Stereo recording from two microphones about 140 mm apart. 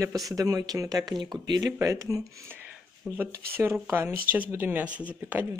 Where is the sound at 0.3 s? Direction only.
25° right (ahead or behind).